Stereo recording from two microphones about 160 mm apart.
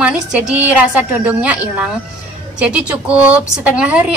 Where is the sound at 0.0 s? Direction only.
5° right (ahead or behind).